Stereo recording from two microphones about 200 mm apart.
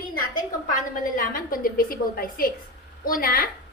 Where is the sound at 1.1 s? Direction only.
45° left (ahead or behind).